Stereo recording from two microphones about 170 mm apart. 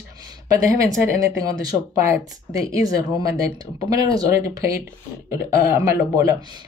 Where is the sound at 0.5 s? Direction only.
20° right (ahead or behind).